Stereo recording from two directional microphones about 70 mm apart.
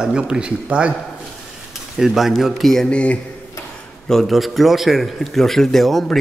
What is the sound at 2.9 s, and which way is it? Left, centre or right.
Speech, centre.